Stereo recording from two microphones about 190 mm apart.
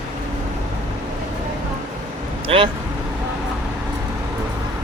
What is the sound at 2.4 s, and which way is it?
Vehicle, 25° right (ahead or behind).